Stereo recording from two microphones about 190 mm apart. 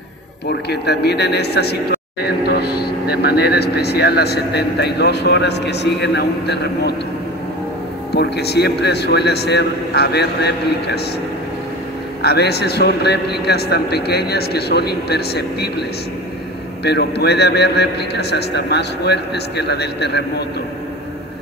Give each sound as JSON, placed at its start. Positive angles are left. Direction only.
{"t": 0.5, "sound": "a man's voice", "side_deg": 60}
{"t": 8.1, "sound": "a man's voice", "side_deg": 60}
{"t": 12.2, "sound": "a man's voice", "side_deg": 60}
{"t": 16.8, "sound": "a man's voice", "side_deg": 60}